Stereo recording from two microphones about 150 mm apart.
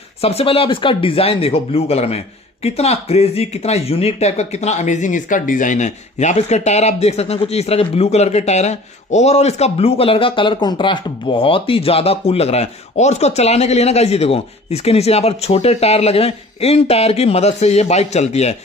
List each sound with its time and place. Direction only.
0.2 s speech: 40° left (ahead or behind)